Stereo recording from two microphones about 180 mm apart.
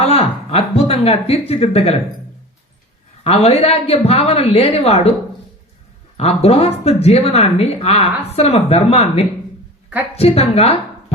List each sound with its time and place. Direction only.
0.0 s speech: 35° left (ahead or behind)
3.2 s speech: 35° left (ahead or behind)
6.1 s speech: 35° left (ahead or behind)